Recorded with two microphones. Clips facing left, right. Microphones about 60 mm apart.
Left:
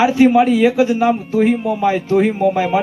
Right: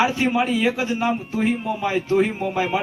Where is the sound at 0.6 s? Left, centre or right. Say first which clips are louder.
Left 8 dB; right.